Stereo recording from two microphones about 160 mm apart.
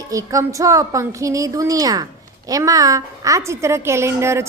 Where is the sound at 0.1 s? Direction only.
20° right (ahead or behind).